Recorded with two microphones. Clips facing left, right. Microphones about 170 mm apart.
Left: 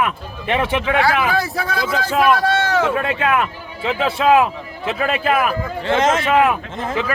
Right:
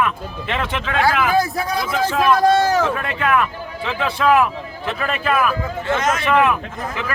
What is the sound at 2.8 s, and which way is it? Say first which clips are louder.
Speech: left 2 dB; 25° left (ahead or behind).